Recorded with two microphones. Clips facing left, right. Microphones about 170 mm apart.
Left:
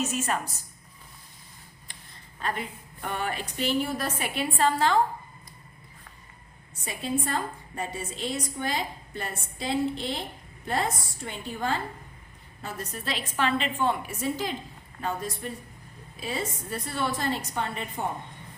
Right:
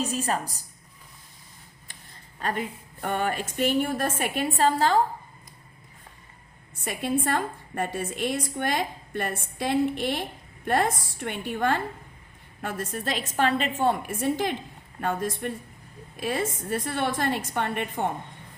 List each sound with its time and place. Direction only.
0.0 s a woman's voice: 35° right (ahead or behind)
2.4 s a woman's voice: 45° right (ahead or behind)
7.3 s a woman's voice: 55° right (ahead or behind)
12.6 s a woman's voice: 50° right (ahead or behind)